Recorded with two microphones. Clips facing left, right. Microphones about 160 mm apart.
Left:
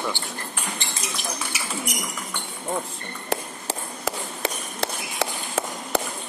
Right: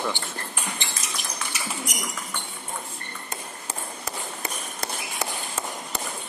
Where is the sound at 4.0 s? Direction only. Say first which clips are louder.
Left 6 dB; 90° left.